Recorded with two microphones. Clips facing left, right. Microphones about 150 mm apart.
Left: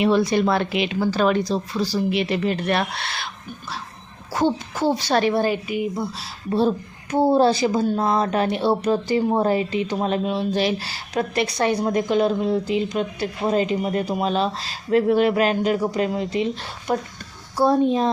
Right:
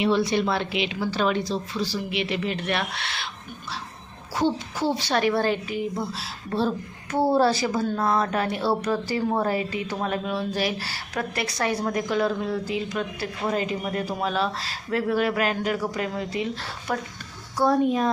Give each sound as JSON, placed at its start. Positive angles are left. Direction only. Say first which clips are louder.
{"t": 0.0, "sound": "speech", "louder": "left 4 dB", "side_deg": 45}
{"t": 4.4, "sound": "a woman's voice", "louder": "left 3 dB", "side_deg": 50}
{"t": 5.2, "sound": "a woman's voice", "louder": "left 2 dB", "side_deg": 15}